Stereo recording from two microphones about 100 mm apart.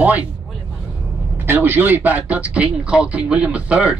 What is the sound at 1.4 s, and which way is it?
A woman's voice, 20° right (ahead or behind).